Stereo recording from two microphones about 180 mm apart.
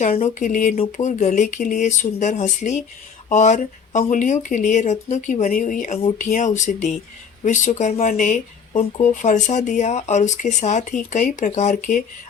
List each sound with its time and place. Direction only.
0.0 s speech: 40° left (ahead or behind)